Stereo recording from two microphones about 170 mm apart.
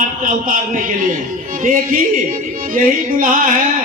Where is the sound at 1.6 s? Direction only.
55° right (ahead or behind).